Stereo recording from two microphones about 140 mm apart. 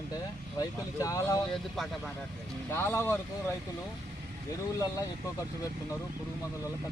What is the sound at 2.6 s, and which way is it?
Speech, 20° left (ahead or behind).